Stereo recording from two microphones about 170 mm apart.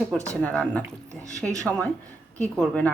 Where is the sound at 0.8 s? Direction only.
20° right (ahead or behind).